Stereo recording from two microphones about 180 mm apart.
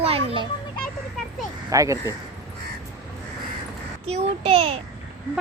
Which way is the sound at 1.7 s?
15° right (ahead or behind).